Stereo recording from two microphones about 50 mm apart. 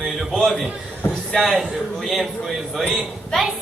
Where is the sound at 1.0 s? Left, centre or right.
Left.